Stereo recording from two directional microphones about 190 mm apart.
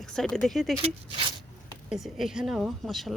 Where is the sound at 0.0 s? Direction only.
5° left (ahead or behind).